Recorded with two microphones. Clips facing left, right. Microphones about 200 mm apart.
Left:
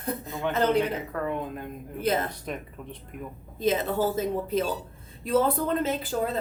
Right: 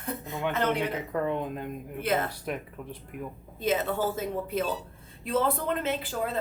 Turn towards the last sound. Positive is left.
turn(degrees=40)  # may be behind; listen again after turning